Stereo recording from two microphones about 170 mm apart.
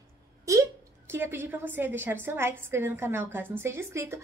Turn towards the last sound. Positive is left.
turn(degrees=-15)  # may be behind; listen again after turning